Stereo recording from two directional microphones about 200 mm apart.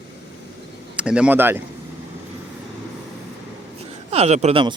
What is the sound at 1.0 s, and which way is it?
Speech, 5° right (ahead or behind).